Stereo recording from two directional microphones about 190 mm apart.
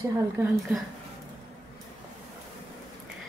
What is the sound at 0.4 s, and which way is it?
Speech, 15° right (ahead or behind).